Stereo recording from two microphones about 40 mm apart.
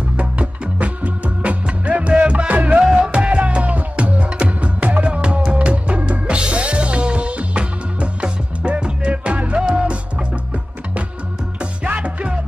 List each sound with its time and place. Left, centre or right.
0.2 s music: right
2.5 s music: right
2.9 s music: right
5.0 s music: right